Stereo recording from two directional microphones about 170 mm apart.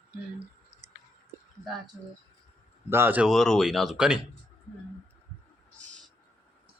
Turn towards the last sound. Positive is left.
turn(degrees=5)  # may be behind; listen again after turning